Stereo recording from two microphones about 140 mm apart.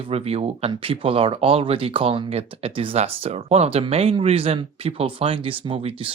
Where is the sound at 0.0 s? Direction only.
45° right (ahead or behind).